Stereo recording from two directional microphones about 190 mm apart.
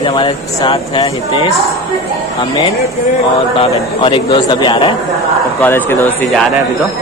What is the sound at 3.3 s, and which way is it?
Speech, 30° left (ahead or behind).